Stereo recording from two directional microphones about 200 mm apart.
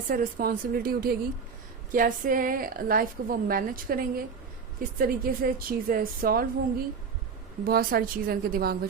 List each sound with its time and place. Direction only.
0.1 s a woman's voice: 45° right (ahead or behind)